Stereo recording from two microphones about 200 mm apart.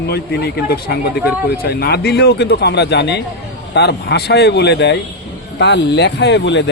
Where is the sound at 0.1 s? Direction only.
55° left (ahead or behind).